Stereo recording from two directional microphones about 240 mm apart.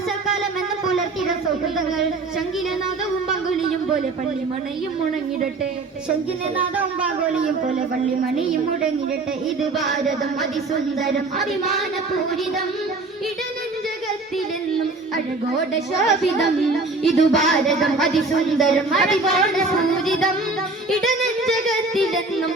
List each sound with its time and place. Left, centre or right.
6.7 s speech: centre
11.0 s speech: centre
16.0 s speech: centre
20.9 s music: centre